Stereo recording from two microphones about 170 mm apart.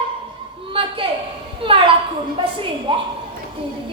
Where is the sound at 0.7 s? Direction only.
30° right (ahead or behind).